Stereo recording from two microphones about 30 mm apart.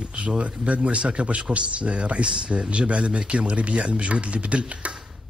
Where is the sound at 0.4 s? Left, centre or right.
Right.